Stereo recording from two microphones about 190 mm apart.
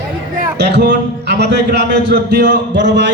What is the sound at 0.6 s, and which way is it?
A man's voice, 60° right (ahead or behind).